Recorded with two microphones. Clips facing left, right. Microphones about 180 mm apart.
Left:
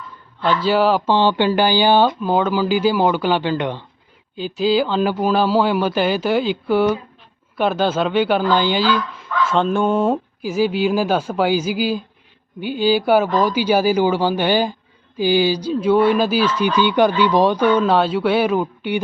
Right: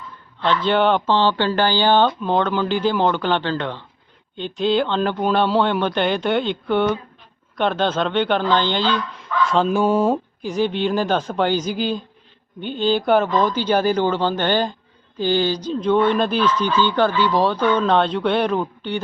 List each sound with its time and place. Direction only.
0.6 s speech: 5° left (ahead or behind)
4.4 s speech: 5° left (ahead or behind)